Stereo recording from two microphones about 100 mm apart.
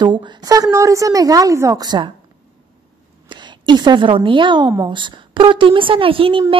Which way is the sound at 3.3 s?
50° right (ahead or behind).